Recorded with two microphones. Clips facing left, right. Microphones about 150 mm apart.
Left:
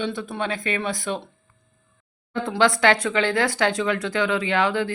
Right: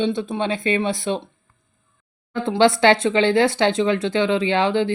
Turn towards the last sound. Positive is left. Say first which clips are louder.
# right 3 dB
turn(degrees=-25)  # may be behind; listen again after turning